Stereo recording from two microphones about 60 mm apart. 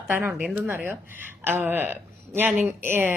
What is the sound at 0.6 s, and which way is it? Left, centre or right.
A woman's voice, right.